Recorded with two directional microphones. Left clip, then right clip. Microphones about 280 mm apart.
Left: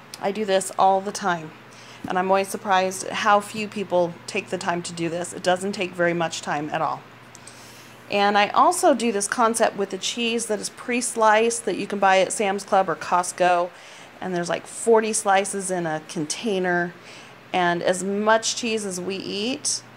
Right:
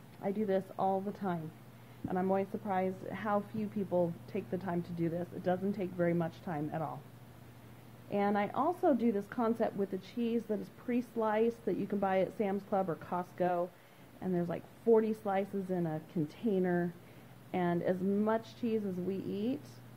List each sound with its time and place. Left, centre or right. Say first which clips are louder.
0.2 s a woman's voice: left 12 dB; centre
8.1 s a woman's voice: left 14 dB; centre